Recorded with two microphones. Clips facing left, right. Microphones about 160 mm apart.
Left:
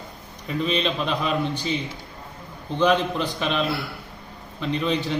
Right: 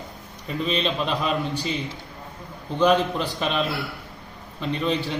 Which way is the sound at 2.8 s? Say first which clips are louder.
Right 1 dB; 5° right (ahead or behind).